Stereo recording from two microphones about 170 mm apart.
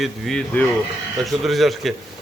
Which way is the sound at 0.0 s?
5° left (ahead or behind).